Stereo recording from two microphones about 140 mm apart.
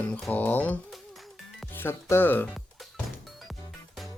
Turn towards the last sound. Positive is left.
turn(degrees=0)  # may be behind; listen again after turning